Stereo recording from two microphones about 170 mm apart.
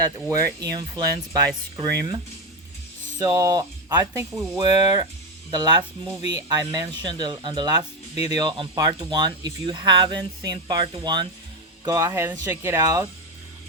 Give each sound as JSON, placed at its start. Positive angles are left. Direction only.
{"t": 0.3, "sound": "speech", "side_deg": -20}